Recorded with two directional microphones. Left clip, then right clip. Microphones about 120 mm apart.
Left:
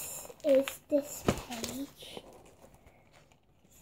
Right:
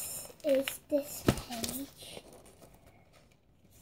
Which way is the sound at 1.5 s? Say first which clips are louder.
Even; 15° left (ahead or behind).